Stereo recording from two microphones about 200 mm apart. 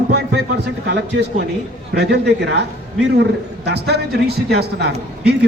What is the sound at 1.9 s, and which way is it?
Speech, 55° right (ahead or behind).